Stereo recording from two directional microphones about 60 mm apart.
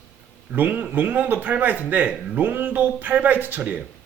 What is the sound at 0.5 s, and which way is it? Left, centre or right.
A man's voice, right.